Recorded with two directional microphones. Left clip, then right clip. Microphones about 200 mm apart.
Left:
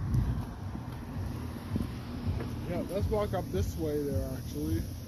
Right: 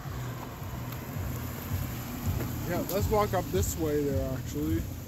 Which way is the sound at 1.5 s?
80° right.